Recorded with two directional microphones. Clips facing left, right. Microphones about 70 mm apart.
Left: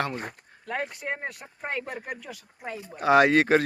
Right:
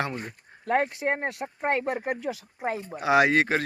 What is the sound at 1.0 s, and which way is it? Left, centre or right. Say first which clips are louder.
Speech: right 5 dB; right.